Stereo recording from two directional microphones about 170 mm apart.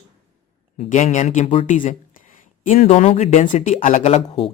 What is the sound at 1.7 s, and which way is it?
Speech, 50° left (ahead or behind).